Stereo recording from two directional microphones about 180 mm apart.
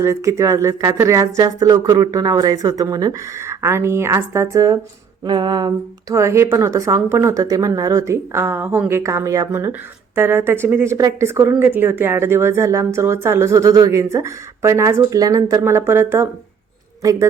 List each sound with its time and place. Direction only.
0.0 s a man's voice: 15° right (ahead or behind)